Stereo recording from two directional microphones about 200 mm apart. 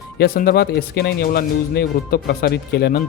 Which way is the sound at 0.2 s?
50° left (ahead or behind).